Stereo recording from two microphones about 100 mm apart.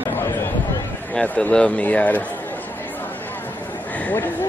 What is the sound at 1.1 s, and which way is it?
Speech, 15° left (ahead or behind).